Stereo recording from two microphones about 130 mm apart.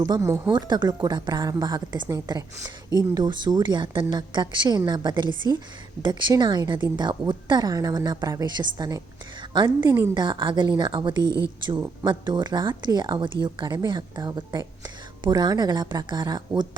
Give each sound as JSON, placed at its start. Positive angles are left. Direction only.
{"t": 0.1, "sound": "speech", "side_deg": -25}
{"t": 0.5, "sound": "a woman's voice", "side_deg": -35}